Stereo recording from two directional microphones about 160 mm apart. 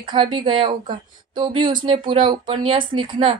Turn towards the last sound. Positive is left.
turn(degrees=-35)  # may be behind; listen again after turning